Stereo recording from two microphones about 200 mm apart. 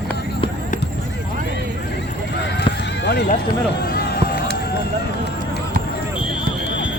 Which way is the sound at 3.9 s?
50° left (ahead or behind).